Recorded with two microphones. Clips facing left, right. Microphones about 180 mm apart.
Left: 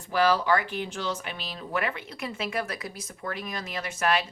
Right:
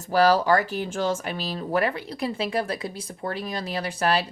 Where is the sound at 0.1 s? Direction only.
40° right (ahead or behind).